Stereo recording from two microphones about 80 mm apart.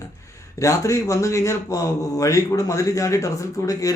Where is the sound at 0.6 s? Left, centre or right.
Left.